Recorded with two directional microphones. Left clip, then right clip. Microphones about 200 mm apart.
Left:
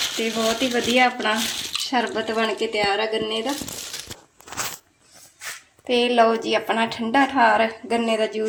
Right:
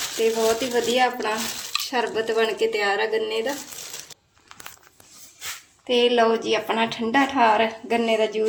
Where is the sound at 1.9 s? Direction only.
20° left (ahead or behind).